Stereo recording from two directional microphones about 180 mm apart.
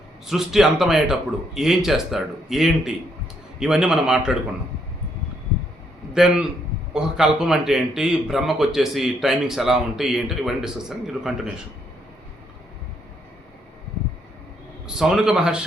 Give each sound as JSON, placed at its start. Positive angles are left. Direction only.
{"t": 0.3, "sound": "a man's voice", "side_deg": 0}
{"t": 6.1, "sound": "a man's voice", "side_deg": -5}
{"t": 14.8, "sound": "a man's voice", "side_deg": -5}